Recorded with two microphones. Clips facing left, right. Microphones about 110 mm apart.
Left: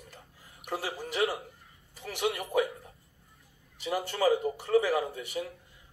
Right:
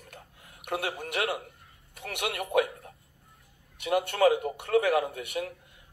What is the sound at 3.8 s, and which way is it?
A man's voice, 60° right (ahead or behind).